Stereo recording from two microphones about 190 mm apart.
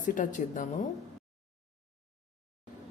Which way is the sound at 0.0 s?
45° left (ahead or behind).